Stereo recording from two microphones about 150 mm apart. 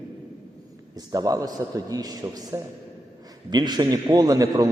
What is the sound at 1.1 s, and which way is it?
A man's voice, 25° right (ahead or behind).